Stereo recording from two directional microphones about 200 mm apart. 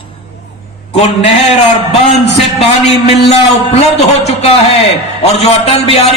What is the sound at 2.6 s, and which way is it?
A man's voice, 30° left (ahead or behind).